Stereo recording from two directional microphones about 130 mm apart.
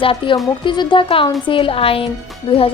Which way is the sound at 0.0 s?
45° left (ahead or behind).